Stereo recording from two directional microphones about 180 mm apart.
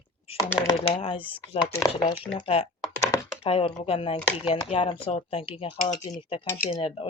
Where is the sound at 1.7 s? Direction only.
15° left (ahead or behind).